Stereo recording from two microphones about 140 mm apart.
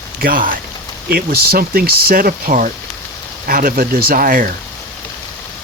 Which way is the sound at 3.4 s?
90° right.